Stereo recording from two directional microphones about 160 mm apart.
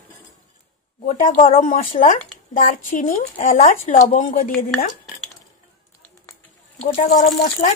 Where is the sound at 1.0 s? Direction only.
55° left (ahead or behind).